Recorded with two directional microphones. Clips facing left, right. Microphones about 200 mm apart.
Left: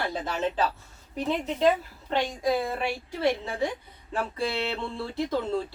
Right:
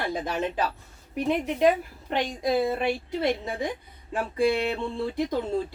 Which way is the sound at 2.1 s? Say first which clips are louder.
Right 1 dB; 20° right (ahead or behind).